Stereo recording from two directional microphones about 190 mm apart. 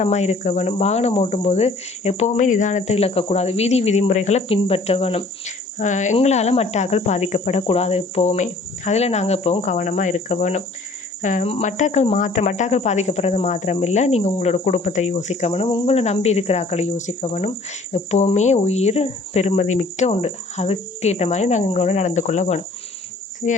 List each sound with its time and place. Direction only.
0.0 s cricket: 35° left (ahead or behind)